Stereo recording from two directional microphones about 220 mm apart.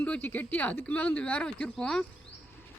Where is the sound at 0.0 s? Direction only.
10° left (ahead or behind).